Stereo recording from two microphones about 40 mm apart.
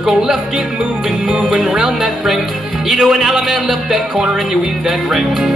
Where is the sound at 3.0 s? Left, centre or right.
Centre.